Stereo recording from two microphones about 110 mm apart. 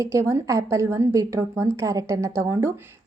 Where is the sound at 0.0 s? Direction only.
25° right (ahead or behind).